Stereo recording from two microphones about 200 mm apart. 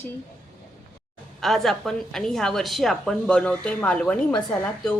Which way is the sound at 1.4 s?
Centre (ahead or behind).